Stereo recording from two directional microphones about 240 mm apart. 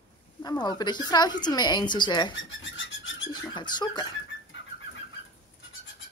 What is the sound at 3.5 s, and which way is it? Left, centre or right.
Speech, centre.